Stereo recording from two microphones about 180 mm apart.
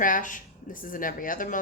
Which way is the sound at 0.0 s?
45° left (ahead or behind).